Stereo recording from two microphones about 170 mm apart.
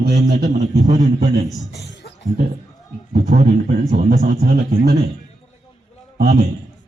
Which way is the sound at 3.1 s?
45° right (ahead or behind).